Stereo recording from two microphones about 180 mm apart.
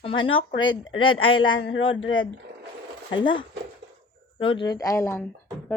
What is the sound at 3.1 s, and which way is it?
Speech, 25° left (ahead or behind).